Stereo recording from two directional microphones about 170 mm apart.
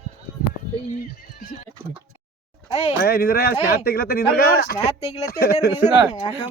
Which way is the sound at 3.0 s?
65° left (ahead or behind).